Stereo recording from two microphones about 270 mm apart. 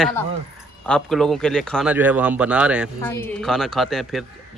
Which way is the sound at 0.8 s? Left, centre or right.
Centre.